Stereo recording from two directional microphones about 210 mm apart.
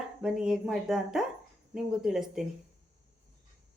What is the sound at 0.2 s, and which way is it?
Speech, 5° right (ahead or behind).